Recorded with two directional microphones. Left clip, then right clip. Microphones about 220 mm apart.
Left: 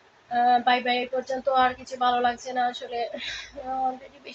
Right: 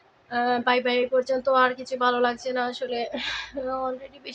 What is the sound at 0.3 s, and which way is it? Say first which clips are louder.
Speech: left 3 dB; 20° right (ahead or behind).